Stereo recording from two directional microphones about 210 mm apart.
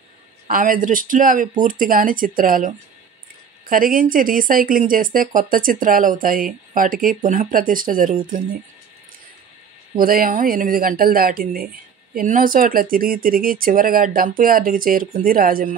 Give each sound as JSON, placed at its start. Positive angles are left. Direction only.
{"t": 0.5, "sound": "speech", "side_deg": -40}
{"t": 9.9, "sound": "speech", "side_deg": -45}